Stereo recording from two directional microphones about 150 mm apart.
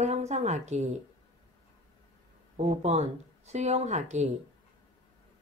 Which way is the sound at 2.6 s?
45° right (ahead or behind).